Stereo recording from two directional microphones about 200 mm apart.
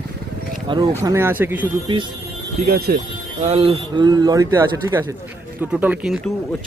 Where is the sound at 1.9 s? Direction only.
25° right (ahead or behind).